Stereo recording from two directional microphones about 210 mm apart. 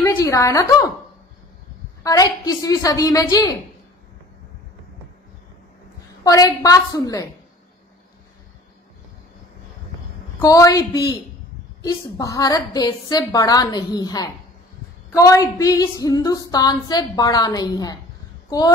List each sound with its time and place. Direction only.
0.0 s a woman's voice: 15° left (ahead or behind)
2.0 s a woman's voice: 15° left (ahead or behind)
6.2 s a woman's voice: 15° left (ahead or behind)
10.4 s a woman's voice: 15° left (ahead or behind)